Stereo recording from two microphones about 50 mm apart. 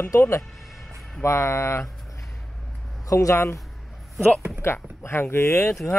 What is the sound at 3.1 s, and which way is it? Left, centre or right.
Speech, left.